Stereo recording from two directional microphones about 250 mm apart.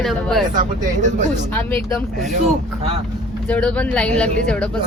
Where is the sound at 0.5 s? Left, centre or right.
Right.